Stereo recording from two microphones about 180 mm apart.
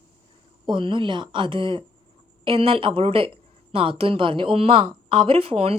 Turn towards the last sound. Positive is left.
turn(degrees=-30)  # may be behind; listen again after turning